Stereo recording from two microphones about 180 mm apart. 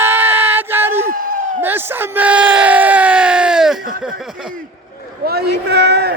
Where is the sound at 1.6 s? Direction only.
10° right (ahead or behind).